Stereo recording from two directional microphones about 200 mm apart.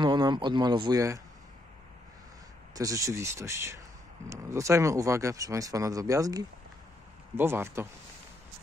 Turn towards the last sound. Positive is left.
turn(degrees=-10)  # may be behind; listen again after turning